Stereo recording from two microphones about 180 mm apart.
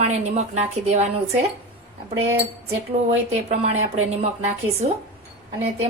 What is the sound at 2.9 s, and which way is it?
Speech, 35° right (ahead or behind).